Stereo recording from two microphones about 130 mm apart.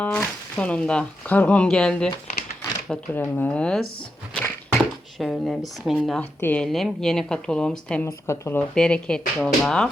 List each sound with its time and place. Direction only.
0.0 s speech: 10° left (ahead or behind)
5.2 s speech: centre (ahead or behind)
8.0 s speech: 20° left (ahead or behind)
8.7 s speech: 5° left (ahead or behind)